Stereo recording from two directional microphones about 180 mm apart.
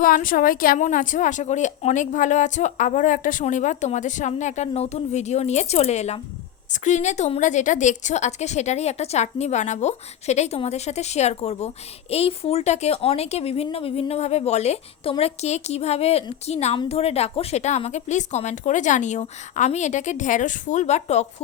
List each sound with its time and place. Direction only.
0.0 s a woman's voice: 50° left (ahead or behind)